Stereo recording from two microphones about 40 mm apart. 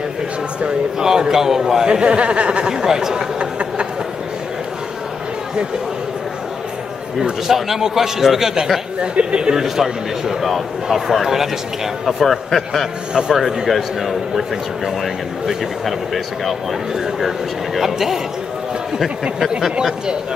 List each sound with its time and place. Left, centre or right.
0.9 s a man's voice: centre
1.9 s speech: right
2.7 s a man's voice: centre
3.3 s a sound: right
7.2 s a man's voice: centre
9.0 s speech: right
9.8 s a man's voice: centre
13.1 s a man's voice: centre
13.7 s a man's voice: centre
15.4 s a man's voice: centre
16.9 s a man's voice: centre